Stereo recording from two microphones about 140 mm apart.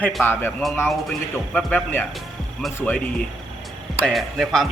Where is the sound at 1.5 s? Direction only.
10° left (ahead or behind).